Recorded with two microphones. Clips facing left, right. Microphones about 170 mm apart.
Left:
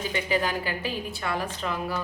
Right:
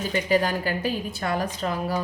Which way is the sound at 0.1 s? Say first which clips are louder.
Right 5 dB; 40° right (ahead or behind).